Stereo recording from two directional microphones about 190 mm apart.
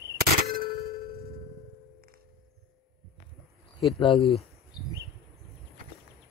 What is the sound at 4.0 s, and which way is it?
Speech, 30° left (ahead or behind).